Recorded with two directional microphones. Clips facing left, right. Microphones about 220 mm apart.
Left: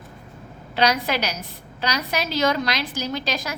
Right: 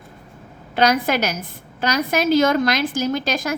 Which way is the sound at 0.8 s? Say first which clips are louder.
Right 4 dB; 50° right (ahead or behind).